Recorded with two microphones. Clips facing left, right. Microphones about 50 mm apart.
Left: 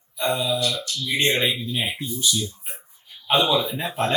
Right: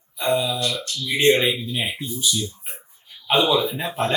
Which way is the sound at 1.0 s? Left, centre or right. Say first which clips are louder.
Right 4 dB; centre.